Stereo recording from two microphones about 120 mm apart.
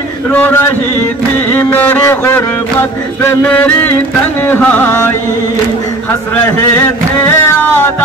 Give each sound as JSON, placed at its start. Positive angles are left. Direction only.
{"t": 0.3, "sound": "carnatic music", "side_deg": 15}
{"t": 6.7, "sound": "music", "side_deg": 20}